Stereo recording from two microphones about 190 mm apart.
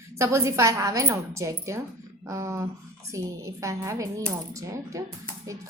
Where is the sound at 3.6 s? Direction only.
15° right (ahead or behind).